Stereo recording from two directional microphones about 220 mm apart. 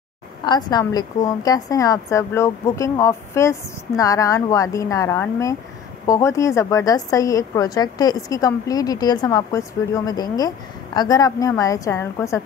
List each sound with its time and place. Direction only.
0.5 s a woman's voice: 20° left (ahead or behind)